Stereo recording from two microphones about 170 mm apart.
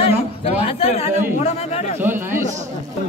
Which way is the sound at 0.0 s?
35° left (ahead or behind).